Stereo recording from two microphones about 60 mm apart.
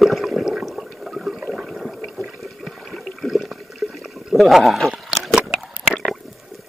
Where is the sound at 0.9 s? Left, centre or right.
Centre.